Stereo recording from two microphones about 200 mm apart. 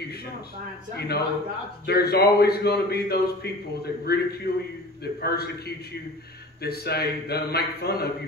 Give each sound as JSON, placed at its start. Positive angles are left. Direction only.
{"t": 0.9, "sound": "a man's voice", "side_deg": 55}
{"t": 6.6, "sound": "a man's voice", "side_deg": 55}